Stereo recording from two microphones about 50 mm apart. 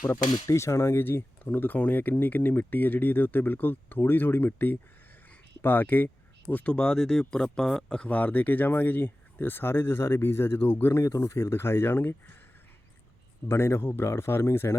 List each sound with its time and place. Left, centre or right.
0.1 s speech: left
1.5 s speech: left
6.7 s speech: centre
8.0 s speech: left
10.9 s speech: left
13.5 s speech: left